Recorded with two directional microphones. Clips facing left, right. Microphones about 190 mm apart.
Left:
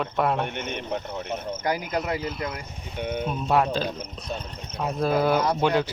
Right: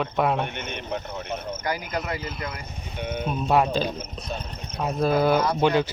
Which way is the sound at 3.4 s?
10° right (ahead or behind).